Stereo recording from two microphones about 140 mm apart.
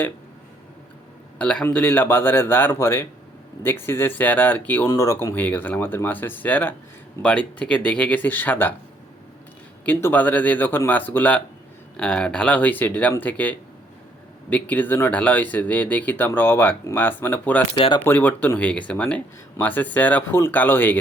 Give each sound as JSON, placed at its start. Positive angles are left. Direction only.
{"t": 1.4, "sound": "speech", "side_deg": 10}
{"t": 9.8, "sound": "speech", "side_deg": 10}
{"t": 17.7, "sound": "speech", "side_deg": 40}
{"t": 18.0, "sound": "speech", "side_deg": 10}